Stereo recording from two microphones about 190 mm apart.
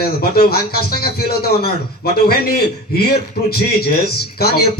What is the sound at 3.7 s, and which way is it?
Speech, 55° left (ahead or behind).